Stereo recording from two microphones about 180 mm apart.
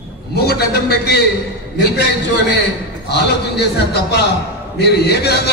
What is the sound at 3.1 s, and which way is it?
A man's voice, 65° left (ahead or behind).